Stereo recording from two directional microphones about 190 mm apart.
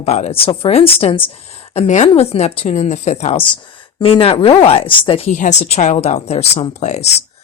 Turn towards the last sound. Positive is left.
turn(degrees=35)  # may be behind; listen again after turning